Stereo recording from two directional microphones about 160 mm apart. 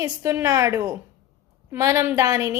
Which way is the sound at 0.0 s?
20° right (ahead or behind).